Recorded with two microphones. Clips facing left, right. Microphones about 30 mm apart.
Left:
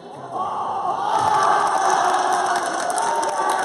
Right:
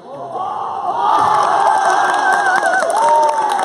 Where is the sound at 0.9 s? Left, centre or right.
Right.